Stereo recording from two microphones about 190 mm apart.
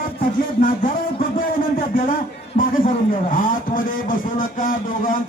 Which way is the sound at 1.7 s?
50° left (ahead or behind).